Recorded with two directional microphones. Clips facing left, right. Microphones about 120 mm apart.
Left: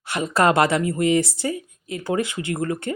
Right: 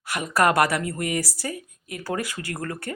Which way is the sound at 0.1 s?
25° left (ahead or behind).